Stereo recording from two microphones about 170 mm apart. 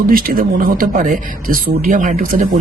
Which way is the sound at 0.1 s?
60° right (ahead or behind).